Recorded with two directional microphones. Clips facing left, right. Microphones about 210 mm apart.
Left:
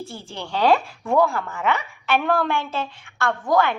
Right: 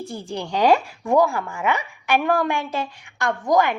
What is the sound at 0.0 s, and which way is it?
A woman's voice, 15° right (ahead or behind).